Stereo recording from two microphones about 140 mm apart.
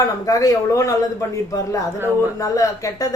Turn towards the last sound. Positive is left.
turn(degrees=25)  # may be behind; listen again after turning